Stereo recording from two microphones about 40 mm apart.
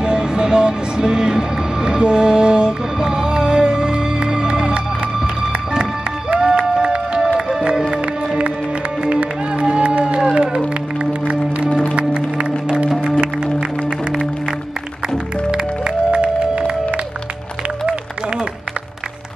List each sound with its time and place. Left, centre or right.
0.0 s a sound: centre
6.7 s music: right
9.0 s music: right
11.9 s music: right
15.5 s music: right